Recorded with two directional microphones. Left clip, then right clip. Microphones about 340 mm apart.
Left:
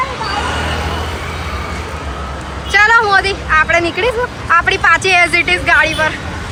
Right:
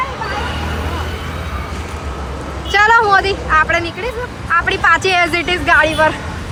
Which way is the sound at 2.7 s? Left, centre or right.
Centre.